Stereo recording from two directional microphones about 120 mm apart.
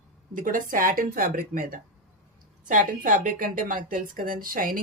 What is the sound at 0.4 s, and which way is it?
Speech, 90° right.